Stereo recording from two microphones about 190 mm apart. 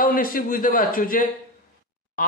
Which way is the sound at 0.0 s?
50° left (ahead or behind).